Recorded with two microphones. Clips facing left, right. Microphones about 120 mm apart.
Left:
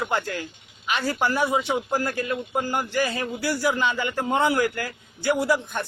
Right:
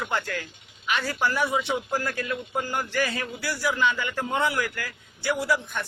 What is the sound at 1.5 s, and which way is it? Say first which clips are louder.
A man's voice: left 3 dB; 35° left (ahead or behind).